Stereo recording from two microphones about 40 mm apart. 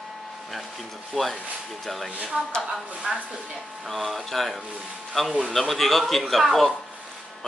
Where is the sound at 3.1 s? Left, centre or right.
Right.